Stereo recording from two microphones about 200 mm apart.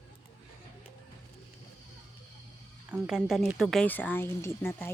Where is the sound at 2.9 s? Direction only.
5° right (ahead or behind).